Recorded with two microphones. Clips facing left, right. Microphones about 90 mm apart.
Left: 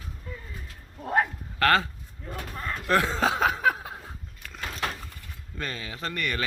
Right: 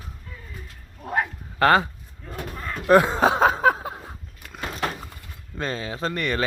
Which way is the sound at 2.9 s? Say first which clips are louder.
Right 7 dB; 20° right (ahead or behind).